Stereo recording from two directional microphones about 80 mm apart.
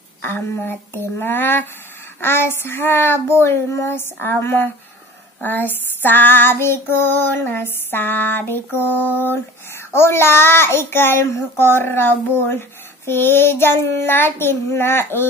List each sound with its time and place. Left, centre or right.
0.2 s a child's voice: left
9.9 s a child's voice: left